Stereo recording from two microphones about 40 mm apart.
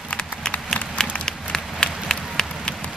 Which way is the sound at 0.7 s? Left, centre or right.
Centre.